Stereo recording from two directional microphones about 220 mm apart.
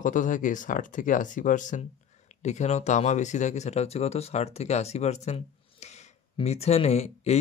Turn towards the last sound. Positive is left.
turn(degrees=30)  # may be behind; listen again after turning